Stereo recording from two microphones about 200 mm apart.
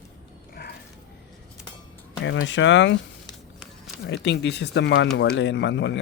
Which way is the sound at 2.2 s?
65° left (ahead or behind).